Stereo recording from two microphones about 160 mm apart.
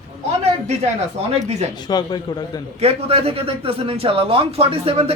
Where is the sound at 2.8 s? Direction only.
40° right (ahead or behind).